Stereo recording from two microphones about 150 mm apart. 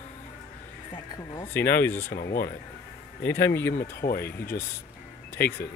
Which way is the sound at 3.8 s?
90° left.